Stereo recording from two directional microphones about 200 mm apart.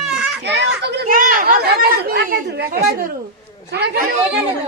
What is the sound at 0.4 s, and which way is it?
Chatter, 55° right (ahead or behind).